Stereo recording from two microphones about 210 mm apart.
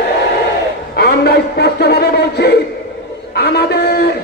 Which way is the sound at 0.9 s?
50° left (ahead or behind).